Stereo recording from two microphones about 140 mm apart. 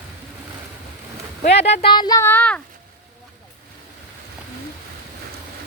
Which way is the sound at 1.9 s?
30° left (ahead or behind).